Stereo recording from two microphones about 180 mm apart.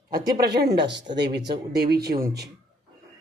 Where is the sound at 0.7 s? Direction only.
75° right (ahead or behind).